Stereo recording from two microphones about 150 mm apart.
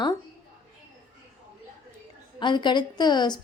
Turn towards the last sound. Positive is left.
turn(degrees=30)  # may be behind; listen again after turning